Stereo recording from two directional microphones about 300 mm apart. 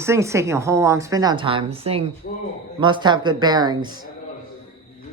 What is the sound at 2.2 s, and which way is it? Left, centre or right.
Speech, left.